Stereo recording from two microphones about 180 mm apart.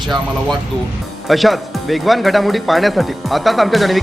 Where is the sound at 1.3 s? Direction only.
Centre (ahead or behind).